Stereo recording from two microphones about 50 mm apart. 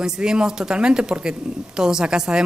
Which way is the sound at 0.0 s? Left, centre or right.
Centre.